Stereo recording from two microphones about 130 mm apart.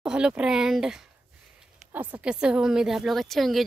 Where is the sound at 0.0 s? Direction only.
5° right (ahead or behind).